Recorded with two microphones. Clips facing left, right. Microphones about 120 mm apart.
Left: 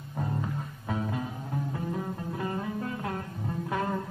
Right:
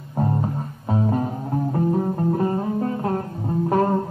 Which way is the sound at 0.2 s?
40° right (ahead or behind).